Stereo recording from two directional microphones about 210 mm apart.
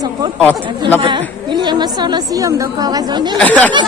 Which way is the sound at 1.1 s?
20° right (ahead or behind).